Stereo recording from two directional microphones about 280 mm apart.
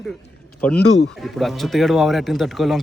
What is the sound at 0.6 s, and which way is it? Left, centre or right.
A man's voice, centre.